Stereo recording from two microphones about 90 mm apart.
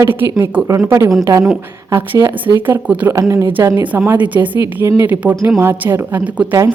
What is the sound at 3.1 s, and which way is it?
Speech, 40° right (ahead or behind).